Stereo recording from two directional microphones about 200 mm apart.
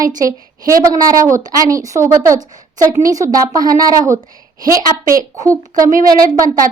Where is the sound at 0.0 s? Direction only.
20° right (ahead or behind).